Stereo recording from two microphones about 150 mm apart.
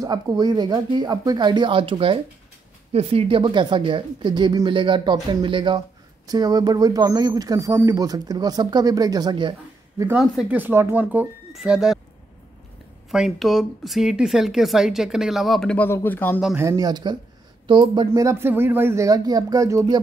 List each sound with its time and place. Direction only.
0.0 s speech: 25° right (ahead or behind); by 12.0 s 5° right (ahead or behind)
13.1 s speech: centre (ahead or behind); by 16.3 s 15° left (ahead or behind)
16.5 s speech: 20° right (ahead or behind)
18.1 s speech: 20° right (ahead or behind)